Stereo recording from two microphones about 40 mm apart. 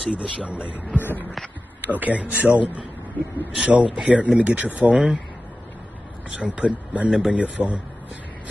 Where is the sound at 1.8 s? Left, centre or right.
Right.